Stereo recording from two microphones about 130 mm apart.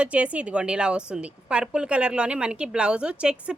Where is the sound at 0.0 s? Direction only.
10° right (ahead or behind).